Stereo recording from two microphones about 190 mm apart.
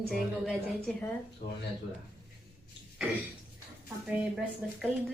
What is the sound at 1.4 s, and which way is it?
Speech, 45° left (ahead or behind).